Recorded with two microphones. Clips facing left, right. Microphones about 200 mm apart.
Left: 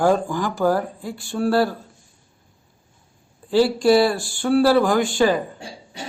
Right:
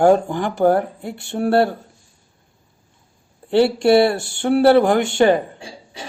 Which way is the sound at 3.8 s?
60° right (ahead or behind).